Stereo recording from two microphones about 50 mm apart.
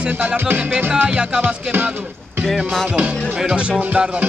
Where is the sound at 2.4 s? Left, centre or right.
Centre.